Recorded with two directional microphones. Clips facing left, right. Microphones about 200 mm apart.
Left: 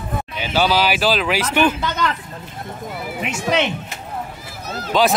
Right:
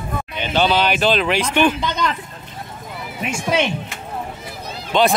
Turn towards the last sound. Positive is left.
turn(degrees=0)  # may be behind; listen again after turning